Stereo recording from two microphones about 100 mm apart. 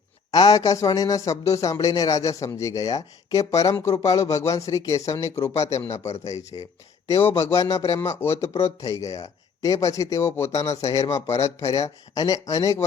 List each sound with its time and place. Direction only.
0.3 s speech: 40° left (ahead or behind)
7.4 s speech: 35° left (ahead or behind)
8.4 s speech: 90° left
8.8 s speech: 35° left (ahead or behind)